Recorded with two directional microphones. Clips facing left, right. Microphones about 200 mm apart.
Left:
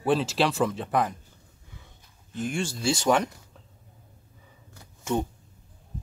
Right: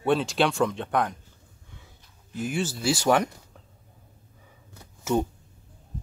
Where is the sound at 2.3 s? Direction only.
5° right (ahead or behind).